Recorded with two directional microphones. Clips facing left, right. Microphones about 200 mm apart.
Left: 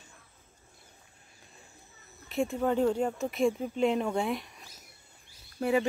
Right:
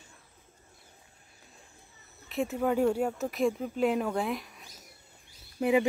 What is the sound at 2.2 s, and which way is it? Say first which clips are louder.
Speech: even; centre (ahead or behind).